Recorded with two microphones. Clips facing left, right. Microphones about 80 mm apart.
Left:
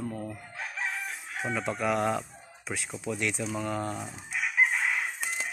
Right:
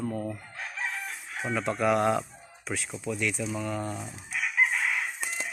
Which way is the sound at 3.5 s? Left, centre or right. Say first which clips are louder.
Even; left.